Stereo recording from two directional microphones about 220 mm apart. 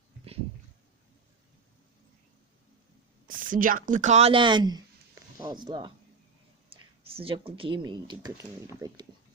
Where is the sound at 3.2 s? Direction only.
40° right (ahead or behind); by 9.0 s 15° right (ahead or behind).